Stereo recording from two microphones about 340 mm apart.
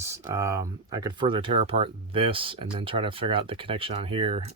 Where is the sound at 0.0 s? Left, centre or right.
Centre.